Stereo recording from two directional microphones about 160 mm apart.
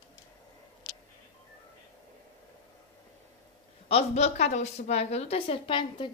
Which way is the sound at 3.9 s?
45° left (ahead or behind).